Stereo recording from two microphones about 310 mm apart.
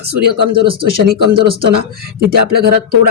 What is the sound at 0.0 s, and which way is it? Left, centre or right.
Speech, right.